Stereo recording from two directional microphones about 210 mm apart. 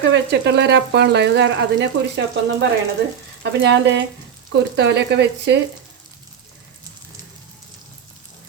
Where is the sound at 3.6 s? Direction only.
55° right (ahead or behind).